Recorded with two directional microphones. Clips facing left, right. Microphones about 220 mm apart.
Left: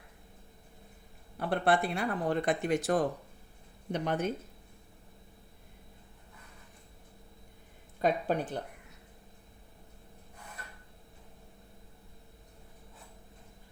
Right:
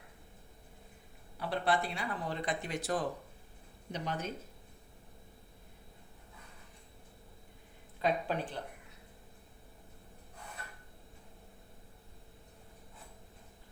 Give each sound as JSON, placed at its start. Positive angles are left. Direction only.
{"t": 1.4, "sound": "speech", "side_deg": 55}
{"t": 8.0, "sound": "speech", "side_deg": 50}